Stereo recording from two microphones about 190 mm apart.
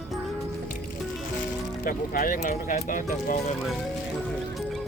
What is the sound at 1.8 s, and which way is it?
Speech, 45° left (ahead or behind).